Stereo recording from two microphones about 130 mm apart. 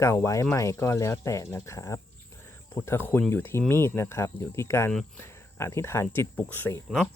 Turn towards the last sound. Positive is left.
turn(degrees=5)  # may be behind; listen again after turning